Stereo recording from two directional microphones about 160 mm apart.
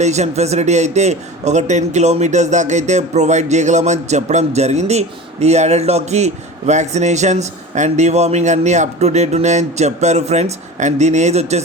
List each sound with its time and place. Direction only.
0.0 s a man's voice: 45° right (ahead or behind)